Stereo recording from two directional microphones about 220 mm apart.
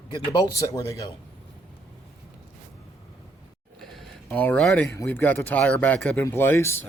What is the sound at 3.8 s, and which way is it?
Speech, centre (ahead or behind).